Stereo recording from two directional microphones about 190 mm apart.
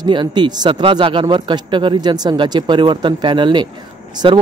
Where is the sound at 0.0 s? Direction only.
25° right (ahead or behind).